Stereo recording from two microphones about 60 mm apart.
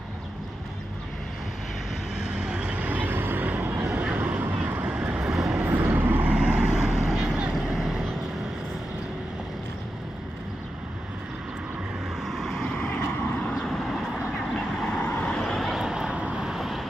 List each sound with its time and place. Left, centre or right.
2.2 s vehicle: centre; by 3.4 s right
3.4 s vehicle: right
3.8 s vehicle: right
4.0 s vehicle: right
4.9 s vehicle: centre
5.7 s vehicle: right
6.3 s vehicle: centre
12.2 s vehicle: centre
12.7 s vehicle: centre
14.5 s vehicle: centre
15.0 s vehicle: centre
15.5 s vehicle: centre
15.8 s vehicle: centre